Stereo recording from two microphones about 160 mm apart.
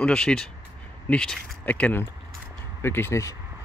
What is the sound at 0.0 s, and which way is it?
Speech, 5° left (ahead or behind).